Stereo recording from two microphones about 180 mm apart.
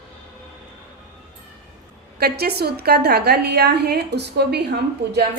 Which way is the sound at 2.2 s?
60° right (ahead or behind).